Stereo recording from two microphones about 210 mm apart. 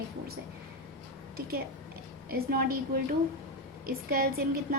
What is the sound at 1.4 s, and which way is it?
A woman's voice, 45° right (ahead or behind).